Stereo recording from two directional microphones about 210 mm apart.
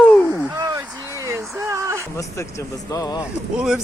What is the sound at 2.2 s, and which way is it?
Speech, 15° left (ahead or behind).